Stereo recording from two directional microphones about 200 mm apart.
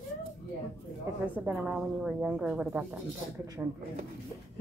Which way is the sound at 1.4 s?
5° right (ahead or behind).